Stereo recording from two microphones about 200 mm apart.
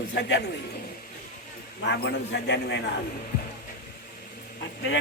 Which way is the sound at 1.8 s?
60° left (ahead or behind).